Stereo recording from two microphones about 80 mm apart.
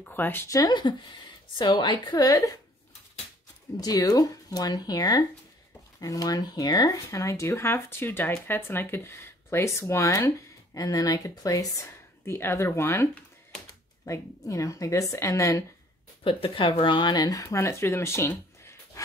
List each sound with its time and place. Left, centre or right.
0.0 s speech: left
0.7 s a woman's voice: left
3.7 s a woman's voice: left
12.3 s speech: left
16.3 s a woman's voice: left
17.1 s speech: left
17.4 s speech: left